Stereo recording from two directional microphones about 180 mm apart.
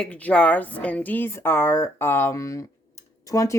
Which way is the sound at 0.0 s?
10° left (ahead or behind).